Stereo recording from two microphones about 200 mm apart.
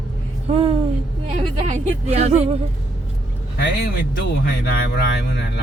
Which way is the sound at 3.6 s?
55° left (ahead or behind).